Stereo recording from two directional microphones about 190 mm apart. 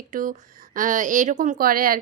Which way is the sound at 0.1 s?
45° right (ahead or behind).